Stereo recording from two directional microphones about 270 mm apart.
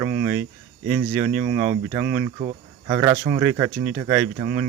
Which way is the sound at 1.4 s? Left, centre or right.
Right.